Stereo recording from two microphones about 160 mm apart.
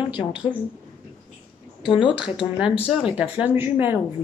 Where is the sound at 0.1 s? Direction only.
30° left (ahead or behind).